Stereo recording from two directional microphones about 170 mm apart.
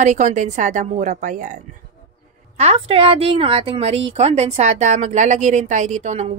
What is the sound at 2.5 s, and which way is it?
A woman's voice, 40° right (ahead or behind).